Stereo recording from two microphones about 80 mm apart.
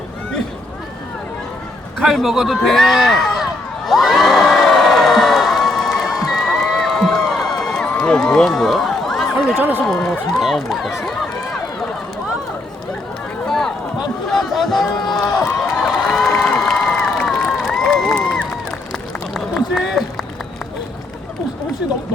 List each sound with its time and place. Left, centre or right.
2.0 s a man's voice: centre
2.6 s crowd: centre
7.9 s run: centre
9.6 s speech: right
10.4 s speech: centre
13.5 s run: centre
14.3 s a sound: centre
18.1 s crowd: centre
18.9 s run: centre